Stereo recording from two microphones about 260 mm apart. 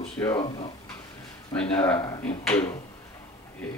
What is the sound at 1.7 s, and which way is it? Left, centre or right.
Speech, centre.